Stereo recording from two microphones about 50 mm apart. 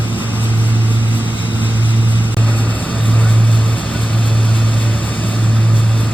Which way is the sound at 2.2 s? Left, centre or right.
Left.